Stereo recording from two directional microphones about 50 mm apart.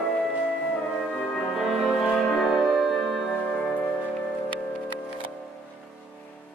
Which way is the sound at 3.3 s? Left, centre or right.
Centre.